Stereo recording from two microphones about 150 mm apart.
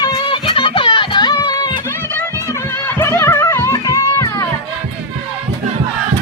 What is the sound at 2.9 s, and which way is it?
Music, 15° left (ahead or behind).